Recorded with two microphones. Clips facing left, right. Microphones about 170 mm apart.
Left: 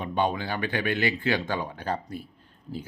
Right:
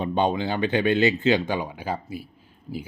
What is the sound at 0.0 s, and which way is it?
Speech, 25° right (ahead or behind).